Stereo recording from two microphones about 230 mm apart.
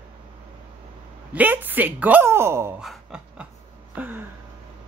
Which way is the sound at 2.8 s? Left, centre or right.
Centre.